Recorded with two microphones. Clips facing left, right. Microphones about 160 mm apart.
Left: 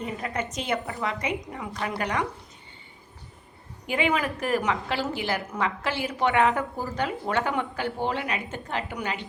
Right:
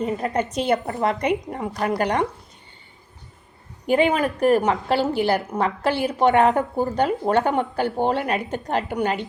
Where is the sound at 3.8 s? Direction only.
35° right (ahead or behind).